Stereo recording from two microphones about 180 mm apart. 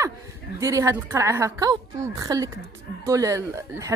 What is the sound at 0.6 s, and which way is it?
A woman's voice, 15° right (ahead or behind).